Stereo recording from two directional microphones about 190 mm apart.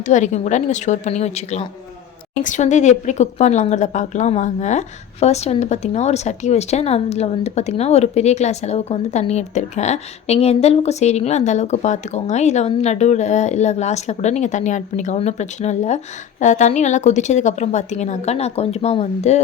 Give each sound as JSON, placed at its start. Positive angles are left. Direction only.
{"t": 0.0, "sound": "speech", "side_deg": 40}